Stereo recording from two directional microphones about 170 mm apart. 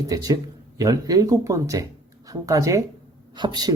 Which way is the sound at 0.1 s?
20° right (ahead or behind).